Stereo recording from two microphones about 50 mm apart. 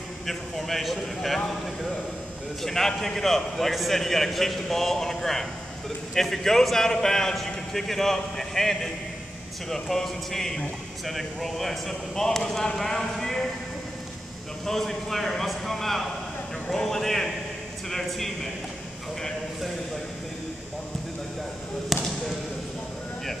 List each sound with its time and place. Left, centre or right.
0.3 s a man's voice: centre
2.6 s a man's voice: centre
14.7 s a man's voice: centre